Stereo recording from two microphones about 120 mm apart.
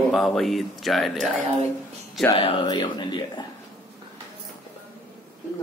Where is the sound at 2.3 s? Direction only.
50° left (ahead or behind).